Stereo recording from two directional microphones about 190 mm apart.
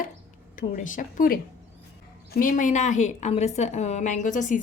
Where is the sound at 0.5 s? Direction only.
45° left (ahead or behind).